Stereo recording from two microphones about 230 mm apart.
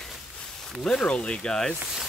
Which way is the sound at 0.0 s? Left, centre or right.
Centre.